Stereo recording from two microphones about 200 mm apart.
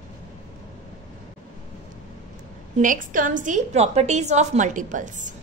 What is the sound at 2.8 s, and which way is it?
A woman's voice, 40° right (ahead or behind).